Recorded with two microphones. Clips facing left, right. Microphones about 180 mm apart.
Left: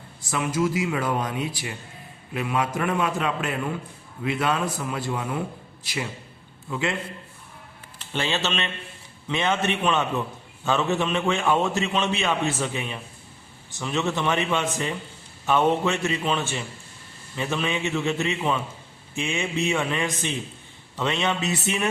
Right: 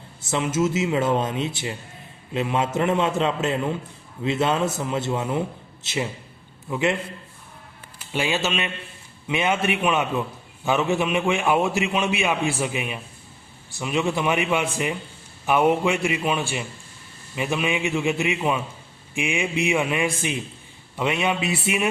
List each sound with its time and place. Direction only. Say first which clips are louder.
0.2 s a man's voice: right 2 dB; 25° right (ahead or behind)
8.1 s a man's voice: right 2 dB; 10° right (ahead or behind)